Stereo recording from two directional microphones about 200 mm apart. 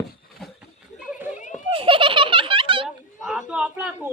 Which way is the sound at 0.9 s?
5° right (ahead or behind).